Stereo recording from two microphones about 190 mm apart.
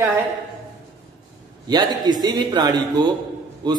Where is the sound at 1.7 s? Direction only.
20° right (ahead or behind).